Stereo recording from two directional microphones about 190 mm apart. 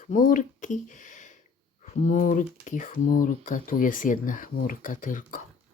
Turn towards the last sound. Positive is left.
turn(degrees=45)  # may be behind; listen again after turning